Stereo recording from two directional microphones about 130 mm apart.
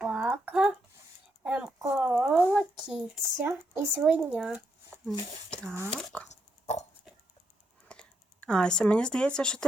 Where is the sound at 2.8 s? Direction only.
5° right (ahead or behind).